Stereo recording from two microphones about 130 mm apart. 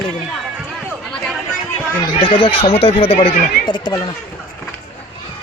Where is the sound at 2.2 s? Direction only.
40° left (ahead or behind).